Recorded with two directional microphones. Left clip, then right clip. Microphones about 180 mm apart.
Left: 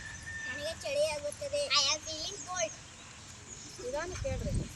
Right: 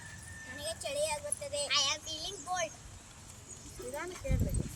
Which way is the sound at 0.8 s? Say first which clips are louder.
Left 3 dB; 15° right (ahead or behind).